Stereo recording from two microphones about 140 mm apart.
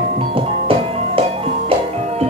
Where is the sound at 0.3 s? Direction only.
40° right (ahead or behind).